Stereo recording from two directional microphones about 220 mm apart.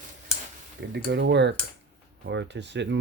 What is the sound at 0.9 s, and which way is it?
Speech, 50° right (ahead or behind).